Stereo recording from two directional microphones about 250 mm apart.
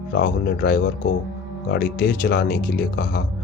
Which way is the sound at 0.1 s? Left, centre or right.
Left.